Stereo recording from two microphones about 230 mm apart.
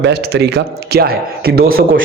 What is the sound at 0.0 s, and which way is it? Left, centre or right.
A man's voice, right.